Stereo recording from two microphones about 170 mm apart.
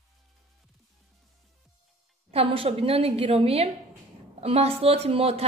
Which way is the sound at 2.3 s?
35° right (ahead or behind).